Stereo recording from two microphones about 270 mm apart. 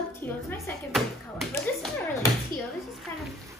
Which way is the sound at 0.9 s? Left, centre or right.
Centre.